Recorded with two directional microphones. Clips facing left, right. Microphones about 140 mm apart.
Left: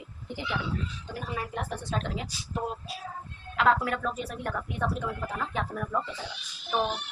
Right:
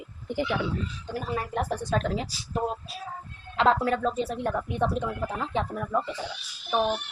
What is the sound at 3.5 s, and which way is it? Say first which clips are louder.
Speech: right 2 dB; 30° right (ahead or behind).